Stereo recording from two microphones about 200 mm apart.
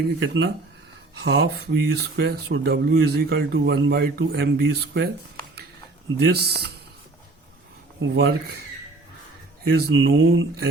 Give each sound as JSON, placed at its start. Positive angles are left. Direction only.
{"t": 0.2, "sound": "speech", "side_deg": -60}
{"t": 6.2, "sound": "speech", "side_deg": -55}
{"t": 8.1, "sound": "speech", "side_deg": -55}
{"t": 9.7, "sound": "speech", "side_deg": -55}